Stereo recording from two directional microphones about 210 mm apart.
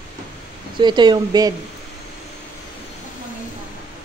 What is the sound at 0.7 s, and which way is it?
Speech, 20° right (ahead or behind).